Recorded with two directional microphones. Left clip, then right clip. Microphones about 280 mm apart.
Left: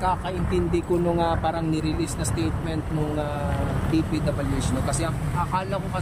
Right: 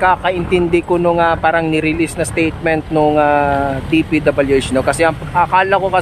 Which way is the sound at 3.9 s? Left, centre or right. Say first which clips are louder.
Right 12 dB; centre.